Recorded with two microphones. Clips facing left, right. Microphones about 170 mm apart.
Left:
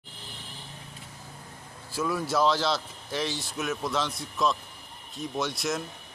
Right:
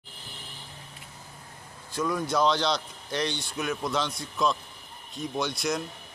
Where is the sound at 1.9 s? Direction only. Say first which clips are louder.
Even; 5° left (ahead or behind).